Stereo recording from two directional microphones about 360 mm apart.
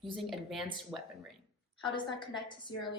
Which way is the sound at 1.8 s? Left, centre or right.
Centre.